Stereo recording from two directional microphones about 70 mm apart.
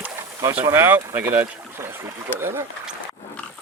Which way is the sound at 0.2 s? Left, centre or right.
Right.